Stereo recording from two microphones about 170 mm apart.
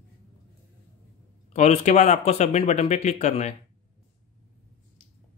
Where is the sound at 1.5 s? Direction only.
40° left (ahead or behind).